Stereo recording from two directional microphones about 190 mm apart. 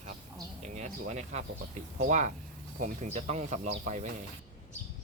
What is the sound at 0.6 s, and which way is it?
Speech, 40° right (ahead or behind).